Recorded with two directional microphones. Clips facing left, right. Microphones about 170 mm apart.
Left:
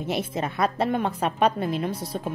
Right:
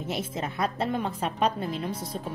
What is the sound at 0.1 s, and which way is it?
A woman's voice, 70° left (ahead or behind).